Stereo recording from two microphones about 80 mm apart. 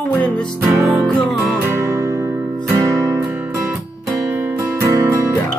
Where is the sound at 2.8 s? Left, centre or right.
Right.